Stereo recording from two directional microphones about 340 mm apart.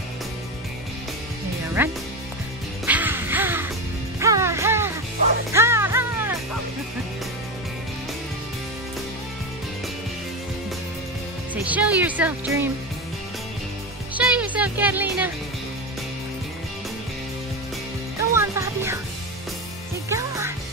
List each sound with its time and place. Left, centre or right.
1.8 s speech: centre
2.8 s music: centre
11.5 s music: centre
14.1 s music: centre
18.3 s music: centre
20.1 s music: centre